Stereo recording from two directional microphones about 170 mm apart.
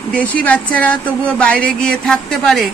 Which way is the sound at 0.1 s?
10° left (ahead or behind).